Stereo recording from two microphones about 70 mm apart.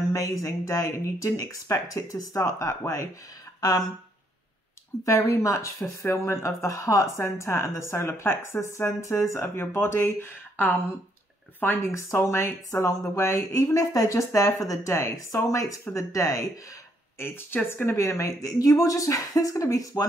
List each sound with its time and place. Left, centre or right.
0.1 s speech: left
5.0 s speech: left
11.9 s speech: left
17.6 s speech: left
18.0 s speech: left